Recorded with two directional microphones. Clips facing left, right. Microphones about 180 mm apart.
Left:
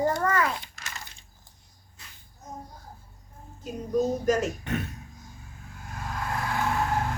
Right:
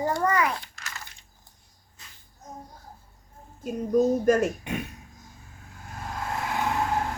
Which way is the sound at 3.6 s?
50° right (ahead or behind).